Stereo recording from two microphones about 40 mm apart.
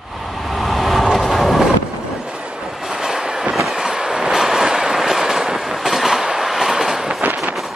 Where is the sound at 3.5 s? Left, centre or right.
Centre.